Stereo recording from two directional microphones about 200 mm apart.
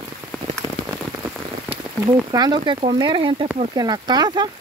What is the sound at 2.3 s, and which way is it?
Speech, 20° right (ahead or behind).